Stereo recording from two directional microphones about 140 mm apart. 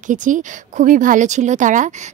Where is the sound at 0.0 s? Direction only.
65° right (ahead or behind).